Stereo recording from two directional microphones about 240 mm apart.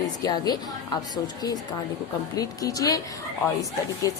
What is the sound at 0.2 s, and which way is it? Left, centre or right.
A woman's voice, centre.